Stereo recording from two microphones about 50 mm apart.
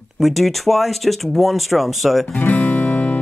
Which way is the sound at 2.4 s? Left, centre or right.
Left.